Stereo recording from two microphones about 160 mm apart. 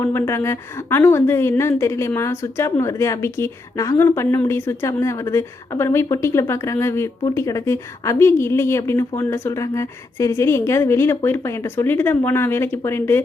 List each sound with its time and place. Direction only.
0.0 s a woman's voice: 15° left (ahead or behind)